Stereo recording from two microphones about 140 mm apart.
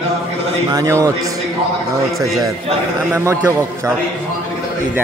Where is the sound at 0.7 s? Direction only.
25° right (ahead or behind).